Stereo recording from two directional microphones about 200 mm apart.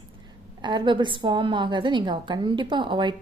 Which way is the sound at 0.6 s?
25° right (ahead or behind).